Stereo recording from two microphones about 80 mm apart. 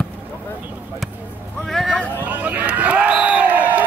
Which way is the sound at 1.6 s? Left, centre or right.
Centre.